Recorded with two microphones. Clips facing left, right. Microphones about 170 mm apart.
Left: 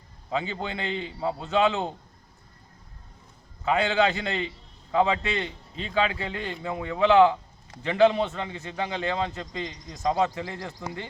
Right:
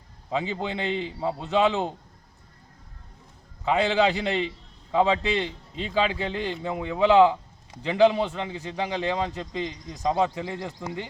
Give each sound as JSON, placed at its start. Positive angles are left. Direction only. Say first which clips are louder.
{"t": 0.3, "sound": "a man's voice", "louder": "right 2 dB", "side_deg": -15}
{"t": 3.7, "sound": "a man's voice", "louder": "right 1 dB", "side_deg": -15}